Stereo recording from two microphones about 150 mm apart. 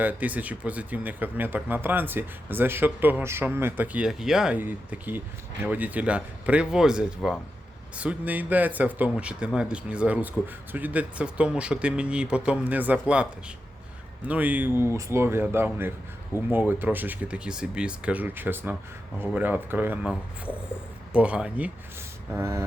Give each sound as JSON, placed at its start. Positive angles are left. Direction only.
{"t": 0.0, "sound": "speech", "side_deg": -10}
{"t": 14.3, "sound": "speech", "side_deg": -10}